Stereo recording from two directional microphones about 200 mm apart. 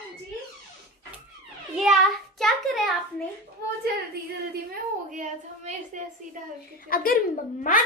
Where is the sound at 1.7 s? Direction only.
Centre (ahead or behind).